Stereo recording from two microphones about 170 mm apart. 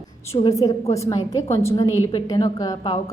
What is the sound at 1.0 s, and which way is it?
A woman's voice, 20° left (ahead or behind).